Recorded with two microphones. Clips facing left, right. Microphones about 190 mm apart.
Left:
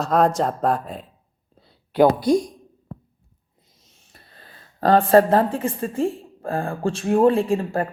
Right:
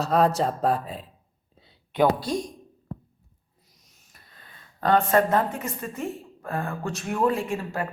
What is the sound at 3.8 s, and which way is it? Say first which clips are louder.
Speech: left 6 dB; 25° left (ahead or behind).